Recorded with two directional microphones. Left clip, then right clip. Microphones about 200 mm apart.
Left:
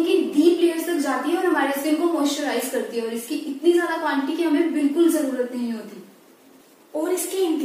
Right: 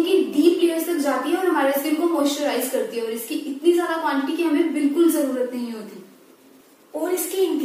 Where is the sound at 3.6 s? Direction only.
Centre (ahead or behind).